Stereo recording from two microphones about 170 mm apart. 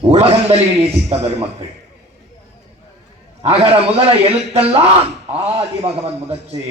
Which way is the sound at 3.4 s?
35° right (ahead or behind).